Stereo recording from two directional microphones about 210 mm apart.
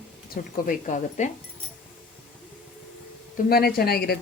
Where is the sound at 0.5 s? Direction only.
40° left (ahead or behind).